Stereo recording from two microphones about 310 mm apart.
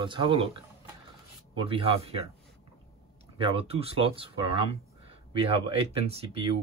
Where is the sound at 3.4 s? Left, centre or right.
Centre.